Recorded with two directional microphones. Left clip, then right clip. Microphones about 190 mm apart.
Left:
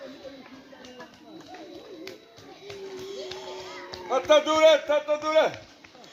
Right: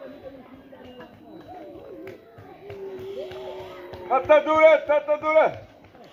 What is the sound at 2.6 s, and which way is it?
Music, centre (ahead or behind).